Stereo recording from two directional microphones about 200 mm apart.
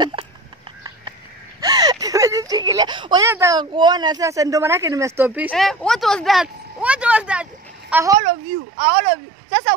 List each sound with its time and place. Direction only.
0.0 s hiccup: 25° right (ahead or behind)
1.6 s a sound: 20° right (ahead or behind)
3.3 s speech: 15° right (ahead or behind)
5.5 s a woman's voice: 5° left (ahead or behind); by 8.2 s 15° right (ahead or behind)
8.2 s speech: 45° right (ahead or behind)